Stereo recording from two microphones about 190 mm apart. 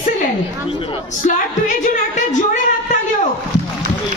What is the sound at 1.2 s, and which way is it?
Speech, 40° left (ahead or behind).